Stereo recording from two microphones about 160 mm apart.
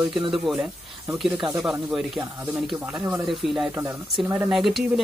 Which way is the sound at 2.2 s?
15° right (ahead or behind).